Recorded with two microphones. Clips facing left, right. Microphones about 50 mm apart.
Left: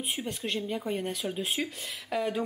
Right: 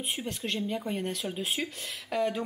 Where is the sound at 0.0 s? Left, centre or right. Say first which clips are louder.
Even; centre.